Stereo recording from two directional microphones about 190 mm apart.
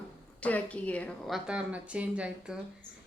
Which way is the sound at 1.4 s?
5° right (ahead or behind).